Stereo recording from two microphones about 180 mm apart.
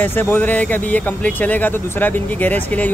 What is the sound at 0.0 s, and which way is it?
Speech, 10° left (ahead or behind).